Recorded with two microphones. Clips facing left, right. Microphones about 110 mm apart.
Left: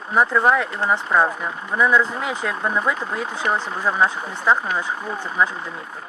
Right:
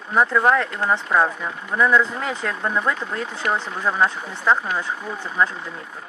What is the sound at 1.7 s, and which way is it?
Speech, 10° left (ahead or behind).